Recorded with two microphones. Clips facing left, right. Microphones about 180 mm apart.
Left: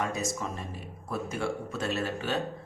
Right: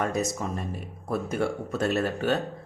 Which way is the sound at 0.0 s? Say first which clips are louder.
Right 4 dB; 55° right (ahead or behind).